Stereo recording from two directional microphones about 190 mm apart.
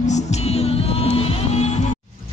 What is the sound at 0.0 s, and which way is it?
Music, 35° left (ahead or behind).